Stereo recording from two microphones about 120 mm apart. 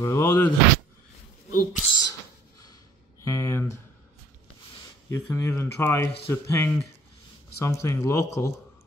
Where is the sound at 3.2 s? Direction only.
25° left (ahead or behind).